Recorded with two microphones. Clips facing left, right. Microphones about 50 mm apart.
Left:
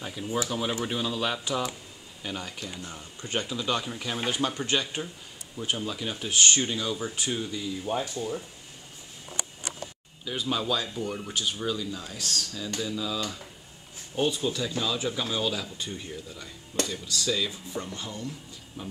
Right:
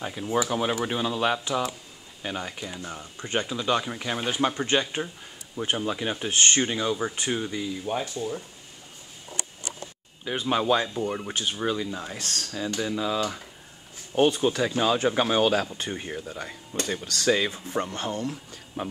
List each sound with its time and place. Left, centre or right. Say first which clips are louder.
0.0 s speech: right 4 dB; right
8.0 s speech: right 1 dB; centre
10.2 s speech: right 5 dB; right